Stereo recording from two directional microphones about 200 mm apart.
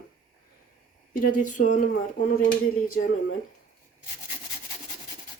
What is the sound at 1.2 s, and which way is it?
Speech, 40° left (ahead or behind).